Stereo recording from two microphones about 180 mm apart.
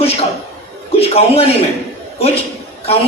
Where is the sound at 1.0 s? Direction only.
35° left (ahead or behind).